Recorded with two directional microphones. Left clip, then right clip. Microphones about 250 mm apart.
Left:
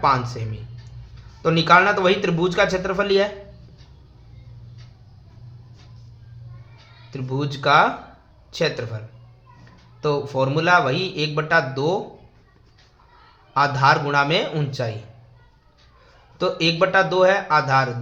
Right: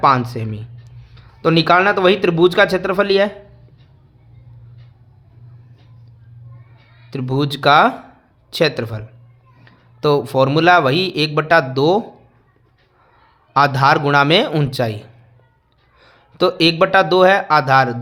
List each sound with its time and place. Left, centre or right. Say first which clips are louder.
0.0 s a man's voice: right 5 dB; right
7.1 s speech: right 7 dB; right
13.5 s speech: right 4 dB; right